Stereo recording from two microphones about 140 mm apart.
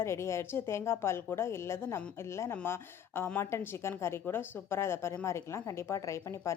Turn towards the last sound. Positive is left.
turn(degrees=20)  # may be behind; listen again after turning